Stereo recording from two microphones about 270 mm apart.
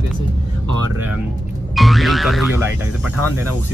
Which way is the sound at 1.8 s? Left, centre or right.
Centre.